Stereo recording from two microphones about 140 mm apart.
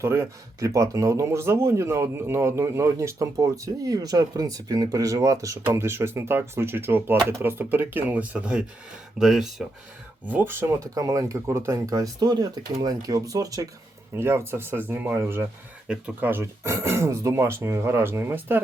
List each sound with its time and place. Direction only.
0.0 s speech: 20° right (ahead or behind)
10.2 s speech: 15° right (ahead or behind)